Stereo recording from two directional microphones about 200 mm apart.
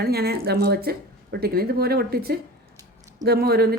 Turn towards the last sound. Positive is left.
turn(degrees=-50)  # may be behind; listen again after turning